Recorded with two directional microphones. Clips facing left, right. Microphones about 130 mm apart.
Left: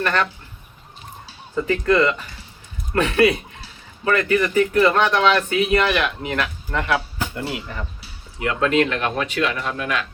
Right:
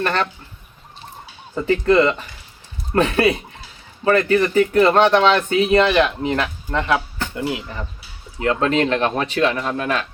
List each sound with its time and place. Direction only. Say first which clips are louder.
0.0 s speech: right 1 dB; 30° right (ahead or behind)
1.6 s speech: right 3 dB; 30° right (ahead or behind)
8.4 s speech: right 1 dB; 35° right (ahead or behind)